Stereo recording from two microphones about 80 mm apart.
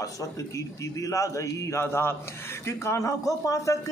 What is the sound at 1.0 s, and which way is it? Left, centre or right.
Speech, left.